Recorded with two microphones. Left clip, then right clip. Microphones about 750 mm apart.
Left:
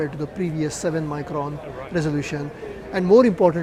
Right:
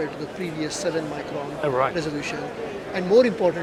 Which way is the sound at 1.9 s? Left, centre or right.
Left.